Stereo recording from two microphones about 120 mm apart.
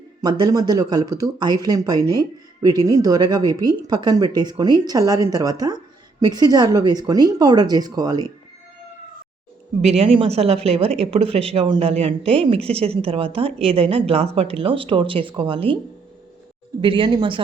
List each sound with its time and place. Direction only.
0.2 s speech: 35° right (ahead or behind)
9.8 s speech: 55° right (ahead or behind)
16.8 s speech: 45° right (ahead or behind)